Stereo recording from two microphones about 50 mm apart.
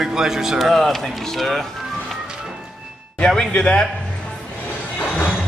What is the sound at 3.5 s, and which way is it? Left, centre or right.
Speech, centre.